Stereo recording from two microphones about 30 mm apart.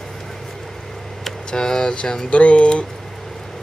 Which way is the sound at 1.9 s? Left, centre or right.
Left.